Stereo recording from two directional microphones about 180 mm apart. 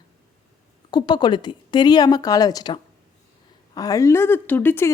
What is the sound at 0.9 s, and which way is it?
Speech, 25° left (ahead or behind).